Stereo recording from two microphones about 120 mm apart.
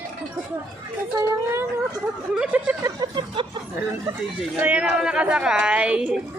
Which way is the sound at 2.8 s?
40° right (ahead or behind).